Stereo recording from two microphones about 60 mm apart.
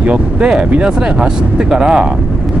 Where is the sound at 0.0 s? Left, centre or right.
Centre.